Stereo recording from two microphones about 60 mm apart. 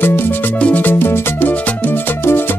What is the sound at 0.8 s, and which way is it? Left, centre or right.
Music, left.